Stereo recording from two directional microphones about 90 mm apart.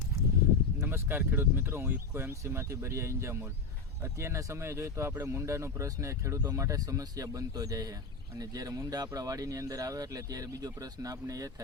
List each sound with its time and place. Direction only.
0.8 s speech: 25° right (ahead or behind)